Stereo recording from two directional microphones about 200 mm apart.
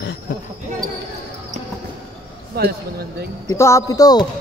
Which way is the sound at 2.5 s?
50° right (ahead or behind).